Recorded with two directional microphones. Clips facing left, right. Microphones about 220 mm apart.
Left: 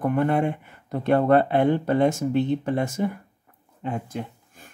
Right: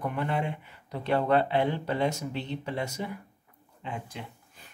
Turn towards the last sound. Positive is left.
turn(degrees=50)  # may be behind; listen again after turning